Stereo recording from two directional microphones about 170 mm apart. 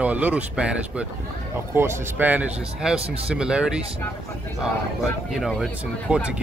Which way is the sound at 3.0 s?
35° right (ahead or behind).